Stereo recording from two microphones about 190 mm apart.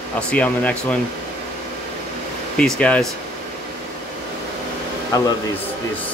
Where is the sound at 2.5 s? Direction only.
5° left (ahead or behind).